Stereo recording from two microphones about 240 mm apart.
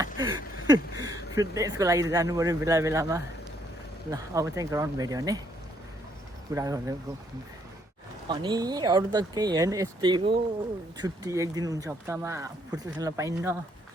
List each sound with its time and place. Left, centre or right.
0.0 s speech: centre
6.5 s speech: centre
8.3 s speech: centre